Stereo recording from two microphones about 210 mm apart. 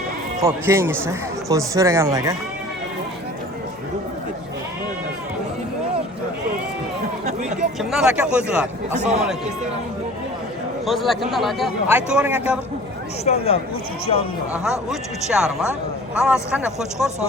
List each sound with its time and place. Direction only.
0.4 s a man's voice: 10° right (ahead or behind)
7.3 s a sound: 35° right (ahead or behind)
7.8 s speech: centre (ahead or behind)
10.8 s speech: centre (ahead or behind)
13.2 s speech: 30° left (ahead or behind)
14.5 s speech: 5° right (ahead or behind)